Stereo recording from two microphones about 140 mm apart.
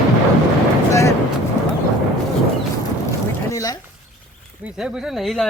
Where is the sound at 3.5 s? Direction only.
25° left (ahead or behind).